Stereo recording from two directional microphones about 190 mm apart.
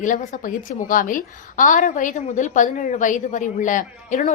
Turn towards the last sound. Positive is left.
turn(degrees=40)  # may be behind; listen again after turning